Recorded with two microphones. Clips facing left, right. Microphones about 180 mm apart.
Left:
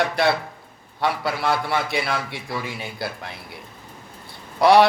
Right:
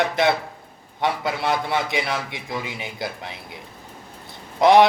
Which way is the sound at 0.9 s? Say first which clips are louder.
Even; 20° right (ahead or behind).